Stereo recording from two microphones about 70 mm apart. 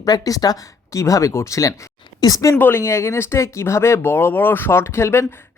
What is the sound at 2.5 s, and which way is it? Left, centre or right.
Speech, left.